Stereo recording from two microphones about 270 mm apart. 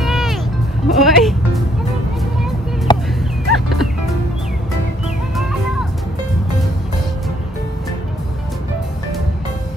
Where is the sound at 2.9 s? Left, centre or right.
Centre.